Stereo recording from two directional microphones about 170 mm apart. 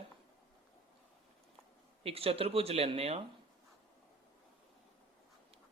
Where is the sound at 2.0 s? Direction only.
35° right (ahead or behind).